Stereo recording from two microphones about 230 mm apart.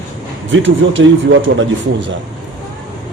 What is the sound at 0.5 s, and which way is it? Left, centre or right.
Speech, right.